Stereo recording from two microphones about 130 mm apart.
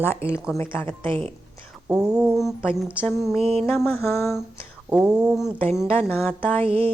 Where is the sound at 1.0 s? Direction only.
40° right (ahead or behind).